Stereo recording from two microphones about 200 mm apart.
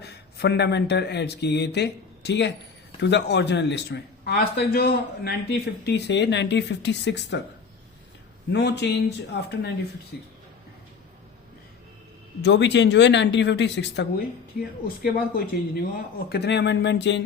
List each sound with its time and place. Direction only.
0.0 s speech: 55° left (ahead or behind)
8.5 s speech: 60° left (ahead or behind)
12.4 s speech: 60° left (ahead or behind)
14.8 s speech: 45° left (ahead or behind)